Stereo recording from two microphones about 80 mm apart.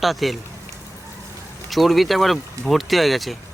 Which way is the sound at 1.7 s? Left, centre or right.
Centre.